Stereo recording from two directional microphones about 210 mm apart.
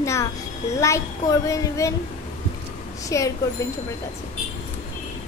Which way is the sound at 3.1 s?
15° left (ahead or behind).